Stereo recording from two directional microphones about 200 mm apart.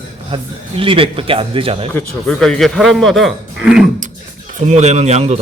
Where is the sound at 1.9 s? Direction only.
5° left (ahead or behind).